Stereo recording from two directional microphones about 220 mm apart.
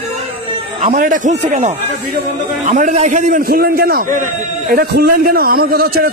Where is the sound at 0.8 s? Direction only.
35° right (ahead or behind).